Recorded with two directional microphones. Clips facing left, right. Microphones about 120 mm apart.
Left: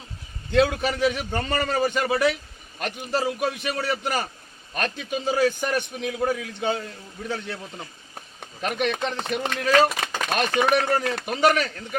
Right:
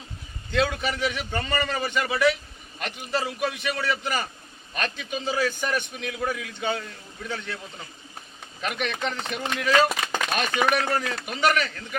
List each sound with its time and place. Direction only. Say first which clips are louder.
0.5 s a man's voice: left 4 dB; 40° left (ahead or behind)
8.6 s a man's voice: left 3 dB; 40° left (ahead or behind)